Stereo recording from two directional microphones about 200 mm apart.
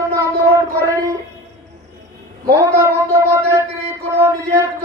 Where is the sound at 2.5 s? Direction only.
15° right (ahead or behind).